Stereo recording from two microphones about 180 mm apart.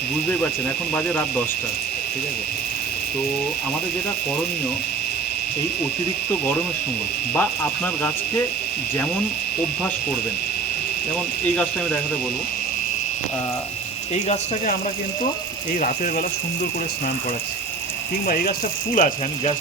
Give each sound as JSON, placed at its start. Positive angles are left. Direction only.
{"t": 7.3, "sound": "speech", "side_deg": 10}
{"t": 18.3, "sound": "speech", "side_deg": 55}
{"t": 18.9, "sound": "speech", "side_deg": 45}